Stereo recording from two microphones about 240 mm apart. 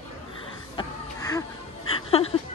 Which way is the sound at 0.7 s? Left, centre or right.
Centre.